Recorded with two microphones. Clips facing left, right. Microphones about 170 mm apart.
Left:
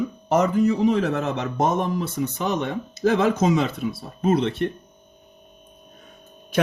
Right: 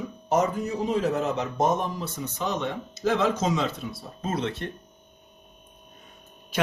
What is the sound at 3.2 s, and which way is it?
Speech, 55° left (ahead or behind).